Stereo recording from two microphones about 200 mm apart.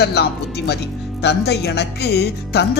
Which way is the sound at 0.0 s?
55° left (ahead or behind).